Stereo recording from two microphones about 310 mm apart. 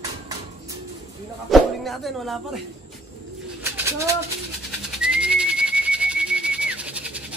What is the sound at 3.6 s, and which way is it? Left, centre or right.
Bird, centre.